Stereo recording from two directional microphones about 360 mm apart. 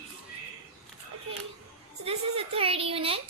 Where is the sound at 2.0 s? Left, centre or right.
Centre.